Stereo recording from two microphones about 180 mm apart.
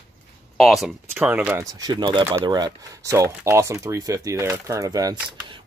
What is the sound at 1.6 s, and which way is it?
Speech, 20° right (ahead or behind).